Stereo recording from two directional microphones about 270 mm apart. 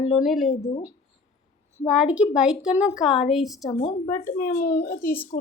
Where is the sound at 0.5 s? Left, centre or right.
Left.